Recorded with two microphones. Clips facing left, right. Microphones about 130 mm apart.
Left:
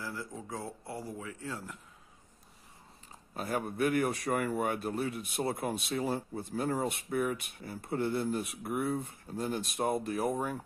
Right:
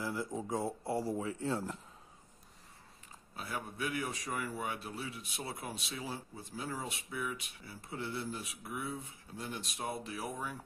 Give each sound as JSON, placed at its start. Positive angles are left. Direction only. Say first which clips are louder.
{"t": 0.0, "sound": "speech", "louder": "right 3 dB", "side_deg": -20}
{"t": 3.3, "sound": "a man's voice", "louder": "left 8 dB", "side_deg": 50}